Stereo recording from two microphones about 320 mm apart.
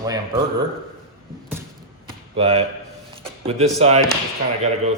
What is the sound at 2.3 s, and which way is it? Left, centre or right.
A man's voice, centre.